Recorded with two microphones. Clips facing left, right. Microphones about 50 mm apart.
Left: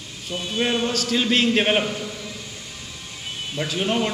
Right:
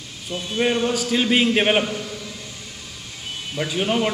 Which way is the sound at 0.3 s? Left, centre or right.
Right.